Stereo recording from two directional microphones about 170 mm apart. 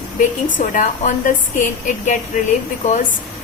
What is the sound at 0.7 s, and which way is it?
Speech, 50° left (ahead or behind).